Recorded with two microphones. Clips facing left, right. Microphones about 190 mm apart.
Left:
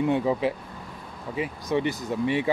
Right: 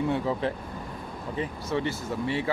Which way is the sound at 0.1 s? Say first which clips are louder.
Left 3 dB; 15° left (ahead or behind).